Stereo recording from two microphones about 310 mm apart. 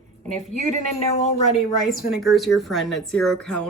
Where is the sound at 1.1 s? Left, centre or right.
Left.